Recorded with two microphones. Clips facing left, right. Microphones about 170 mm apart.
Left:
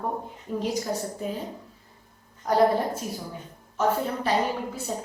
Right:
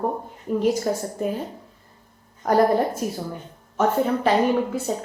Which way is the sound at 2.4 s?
50° right (ahead or behind).